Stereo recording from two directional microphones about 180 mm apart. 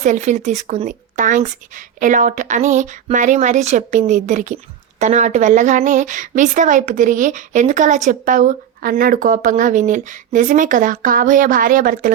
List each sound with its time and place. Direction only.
0.0 s a woman's voice: 40° right (ahead or behind)